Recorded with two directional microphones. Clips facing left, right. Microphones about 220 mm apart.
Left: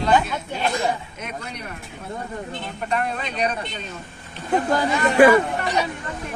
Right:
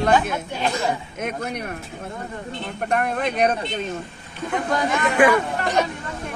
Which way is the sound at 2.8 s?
55° right (ahead or behind).